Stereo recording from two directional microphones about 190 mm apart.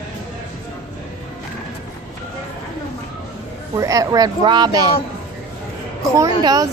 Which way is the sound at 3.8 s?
20° right (ahead or behind).